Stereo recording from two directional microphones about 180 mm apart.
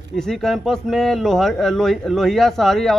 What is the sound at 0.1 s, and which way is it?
Speech, centre (ahead or behind).